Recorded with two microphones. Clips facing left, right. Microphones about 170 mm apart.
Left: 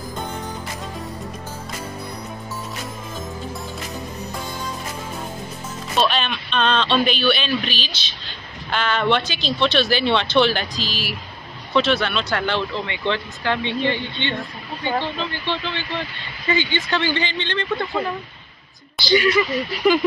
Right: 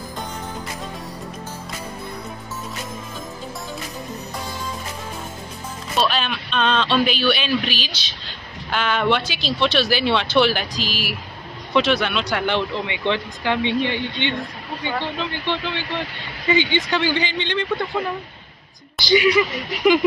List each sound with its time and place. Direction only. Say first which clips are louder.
5.9 s speech: left 1 dB; 5° right (ahead or behind)
19.0 s speech: right 1 dB; 10° right (ahead or behind)